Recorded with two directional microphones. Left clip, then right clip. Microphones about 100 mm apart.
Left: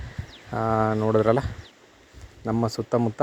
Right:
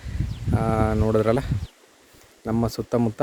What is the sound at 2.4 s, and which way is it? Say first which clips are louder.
Speech: even; 35° right (ahead or behind).